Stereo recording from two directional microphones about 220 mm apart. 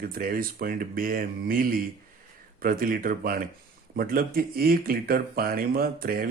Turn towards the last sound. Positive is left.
turn(degrees=-40)  # may be behind; listen again after turning